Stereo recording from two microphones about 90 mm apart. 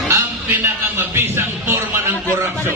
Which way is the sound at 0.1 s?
25° right (ahead or behind).